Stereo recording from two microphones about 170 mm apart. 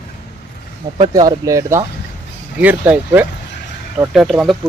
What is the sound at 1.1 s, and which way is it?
Speech, 20° right (ahead or behind).